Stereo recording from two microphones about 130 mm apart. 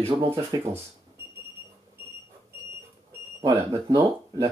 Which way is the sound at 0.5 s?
35° right (ahead or behind).